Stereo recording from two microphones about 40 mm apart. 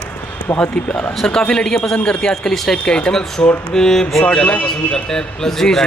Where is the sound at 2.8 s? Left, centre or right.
Left.